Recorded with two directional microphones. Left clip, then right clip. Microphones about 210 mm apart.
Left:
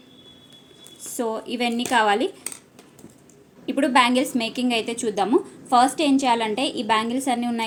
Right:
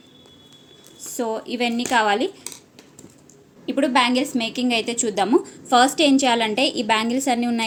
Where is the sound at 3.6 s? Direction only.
5° right (ahead or behind).